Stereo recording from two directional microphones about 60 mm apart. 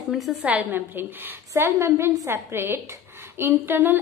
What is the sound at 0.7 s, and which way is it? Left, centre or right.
Speech, right.